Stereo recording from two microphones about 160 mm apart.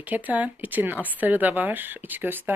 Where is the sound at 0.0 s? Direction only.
10° right (ahead or behind).